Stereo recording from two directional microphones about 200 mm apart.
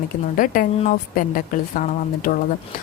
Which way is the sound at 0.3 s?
45° left (ahead or behind).